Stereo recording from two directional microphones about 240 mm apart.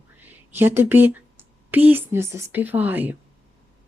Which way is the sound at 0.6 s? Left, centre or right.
Centre.